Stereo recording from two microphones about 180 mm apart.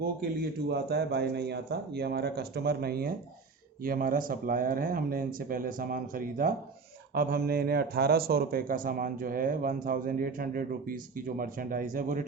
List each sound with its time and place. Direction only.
0.7 s speech: 65° right (ahead or behind); by 12.2 s 50° right (ahead or behind)